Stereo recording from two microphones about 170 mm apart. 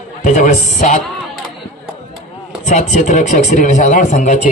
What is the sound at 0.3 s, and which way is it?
Speech, 45° left (ahead or behind).